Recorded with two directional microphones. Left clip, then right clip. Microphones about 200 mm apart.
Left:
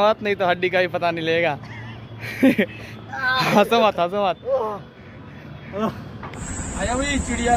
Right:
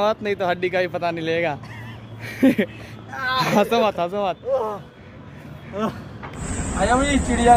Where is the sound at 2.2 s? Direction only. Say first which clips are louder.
Left 1 dB; 15° right (ahead or behind).